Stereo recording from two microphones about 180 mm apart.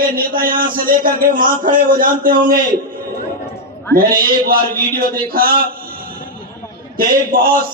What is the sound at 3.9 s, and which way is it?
A man's voice, 55° right (ahead or behind).